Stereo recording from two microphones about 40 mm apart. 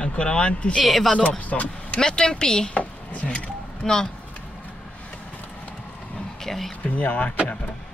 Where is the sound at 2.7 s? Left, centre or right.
Left.